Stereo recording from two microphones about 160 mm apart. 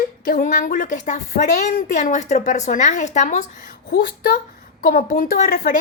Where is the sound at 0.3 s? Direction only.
55° left (ahead or behind).